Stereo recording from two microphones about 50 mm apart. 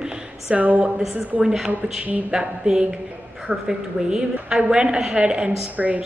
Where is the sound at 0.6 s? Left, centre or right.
Right.